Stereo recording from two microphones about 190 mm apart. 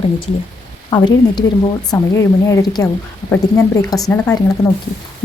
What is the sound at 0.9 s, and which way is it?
A woman's voice, 20° left (ahead or behind).